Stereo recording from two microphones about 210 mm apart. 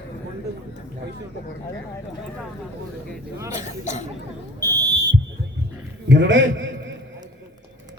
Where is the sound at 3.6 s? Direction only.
35° left (ahead or behind).